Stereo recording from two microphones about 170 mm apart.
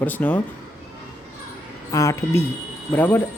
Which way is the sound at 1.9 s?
20° left (ahead or behind).